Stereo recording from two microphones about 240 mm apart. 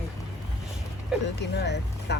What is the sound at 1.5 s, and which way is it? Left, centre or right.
Speech, left.